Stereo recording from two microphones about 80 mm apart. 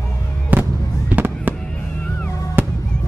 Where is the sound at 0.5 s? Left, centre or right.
Right.